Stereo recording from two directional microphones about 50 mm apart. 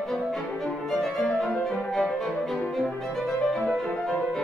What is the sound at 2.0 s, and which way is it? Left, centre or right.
Music, centre.